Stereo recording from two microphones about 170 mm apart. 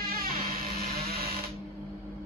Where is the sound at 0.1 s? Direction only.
60° right (ahead or behind).